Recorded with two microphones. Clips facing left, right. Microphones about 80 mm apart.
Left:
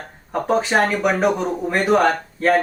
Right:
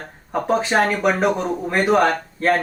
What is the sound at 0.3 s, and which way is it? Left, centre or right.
Speech, centre.